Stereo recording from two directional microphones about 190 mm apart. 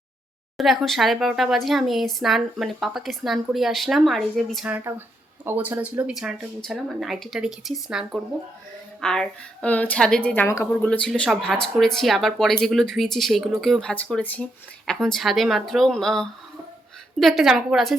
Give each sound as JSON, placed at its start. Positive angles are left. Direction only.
{"t": 0.5, "sound": "speech", "side_deg": 0}